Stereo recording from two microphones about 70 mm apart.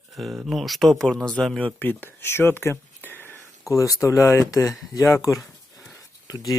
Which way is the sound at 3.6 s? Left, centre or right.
Left.